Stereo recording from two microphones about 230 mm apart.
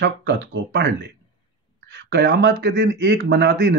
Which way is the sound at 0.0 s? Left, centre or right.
Right.